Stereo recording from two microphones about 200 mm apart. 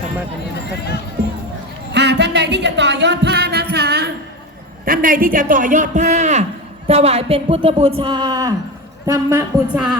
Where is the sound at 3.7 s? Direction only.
50° right (ahead or behind).